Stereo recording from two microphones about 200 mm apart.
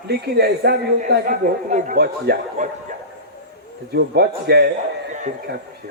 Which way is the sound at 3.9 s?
55° right (ahead or behind).